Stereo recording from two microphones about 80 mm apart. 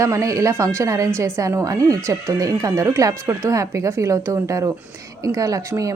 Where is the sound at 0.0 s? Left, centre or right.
Right.